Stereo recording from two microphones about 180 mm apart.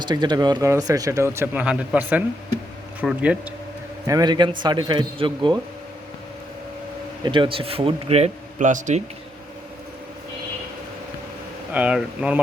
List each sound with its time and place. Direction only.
0.0 s speech: 25° right (ahead or behind); by 3.3 s 5° right (ahead or behind)
4.0 s a man's voice: 20° right (ahead or behind)
7.3 s a man's voice: 30° right (ahead or behind); by 9.0 s 45° right (ahead or behind)
11.7 s speech: 5° right (ahead or behind)